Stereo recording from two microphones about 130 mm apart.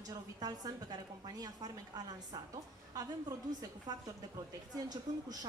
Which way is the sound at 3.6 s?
30° right (ahead or behind).